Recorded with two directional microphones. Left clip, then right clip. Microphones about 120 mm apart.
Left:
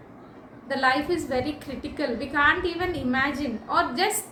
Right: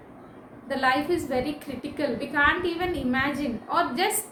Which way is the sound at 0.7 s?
30° right (ahead or behind).